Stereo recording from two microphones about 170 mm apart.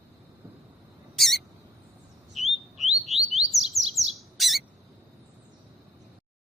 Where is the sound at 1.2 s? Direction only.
Centre (ahead or behind).